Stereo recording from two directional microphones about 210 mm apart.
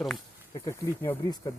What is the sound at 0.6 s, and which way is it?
Speech, 15° left (ahead or behind).